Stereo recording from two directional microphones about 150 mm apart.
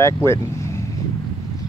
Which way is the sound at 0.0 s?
20° left (ahead or behind).